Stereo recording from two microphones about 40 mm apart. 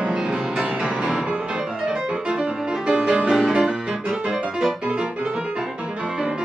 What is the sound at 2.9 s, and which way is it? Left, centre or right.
Music, right.